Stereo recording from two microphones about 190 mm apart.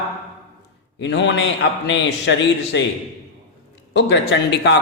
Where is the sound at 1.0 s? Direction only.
70° left (ahead or behind).